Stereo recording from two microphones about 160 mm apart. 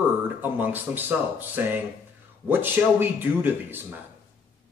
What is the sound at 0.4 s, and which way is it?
A man's voice, 10° right (ahead or behind).